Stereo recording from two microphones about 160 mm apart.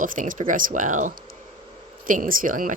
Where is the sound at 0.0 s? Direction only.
55° right (ahead or behind).